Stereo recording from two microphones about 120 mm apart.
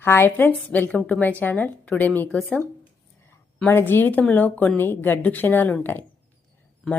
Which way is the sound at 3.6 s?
20° left (ahead or behind).